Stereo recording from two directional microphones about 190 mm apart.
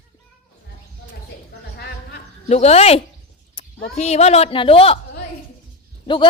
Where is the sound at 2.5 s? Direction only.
35° left (ahead or behind).